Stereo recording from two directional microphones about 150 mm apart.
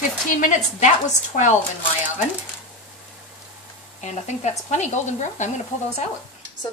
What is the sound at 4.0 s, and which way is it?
Speech, 50° left (ahead or behind).